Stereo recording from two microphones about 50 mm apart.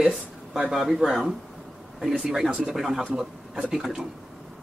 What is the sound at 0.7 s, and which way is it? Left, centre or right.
A man's voice, centre.